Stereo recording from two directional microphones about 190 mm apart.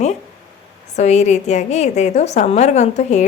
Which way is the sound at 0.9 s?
35° left (ahead or behind).